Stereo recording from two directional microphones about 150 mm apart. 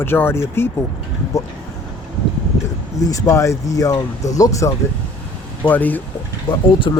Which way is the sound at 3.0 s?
20° left (ahead or behind).